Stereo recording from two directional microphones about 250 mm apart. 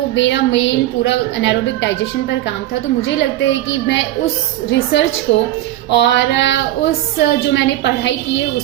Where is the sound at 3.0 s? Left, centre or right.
Left.